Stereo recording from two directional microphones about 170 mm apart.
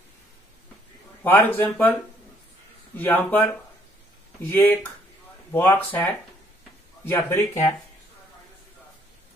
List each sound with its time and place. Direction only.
1.2 s a man's voice: 10° left (ahead or behind)
3.0 s a man's voice: 10° left (ahead or behind)
7.1 s a man's voice: 15° left (ahead or behind)